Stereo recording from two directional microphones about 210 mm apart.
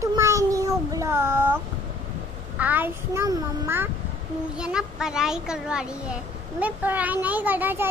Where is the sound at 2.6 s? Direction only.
10° right (ahead or behind).